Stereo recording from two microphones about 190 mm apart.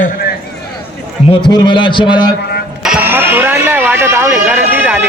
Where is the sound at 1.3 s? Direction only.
25° left (ahead or behind).